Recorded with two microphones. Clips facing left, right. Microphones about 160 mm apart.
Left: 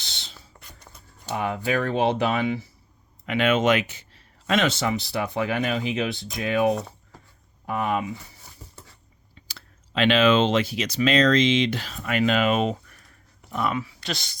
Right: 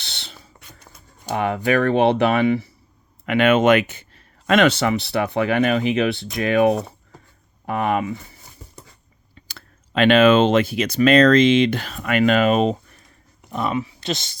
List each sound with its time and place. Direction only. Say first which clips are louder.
0.0 s a sound: right 4 dB; 65° right (ahead or behind)
1.3 s speech: right 5 dB; 70° right (ahead or behind)
9.3 s speech: right 4 dB; 55° right (ahead or behind); by 13.0 s 35° right (ahead or behind)
13.4 s speech: right 3 dB; 20° right (ahead or behind)